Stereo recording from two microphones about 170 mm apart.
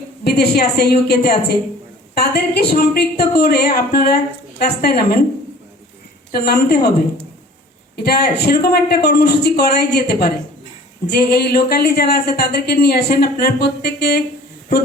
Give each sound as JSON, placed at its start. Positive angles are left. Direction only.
{"t": 0.3, "sound": "speech", "side_deg": 70}
{"t": 6.3, "sound": "speech", "side_deg": 70}
{"t": 7.9, "sound": "speech", "side_deg": 70}